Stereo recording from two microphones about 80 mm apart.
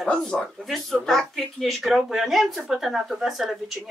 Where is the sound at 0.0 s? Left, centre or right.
Centre.